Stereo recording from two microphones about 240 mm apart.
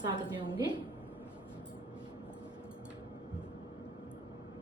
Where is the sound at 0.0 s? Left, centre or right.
Centre.